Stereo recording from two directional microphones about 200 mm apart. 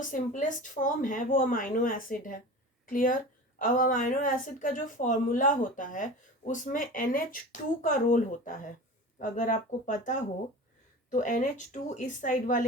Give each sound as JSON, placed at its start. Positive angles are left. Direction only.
{"t": 0.1, "sound": "a woman's voice", "side_deg": 40}